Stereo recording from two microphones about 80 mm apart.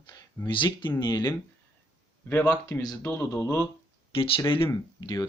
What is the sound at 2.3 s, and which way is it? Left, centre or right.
Speech, left.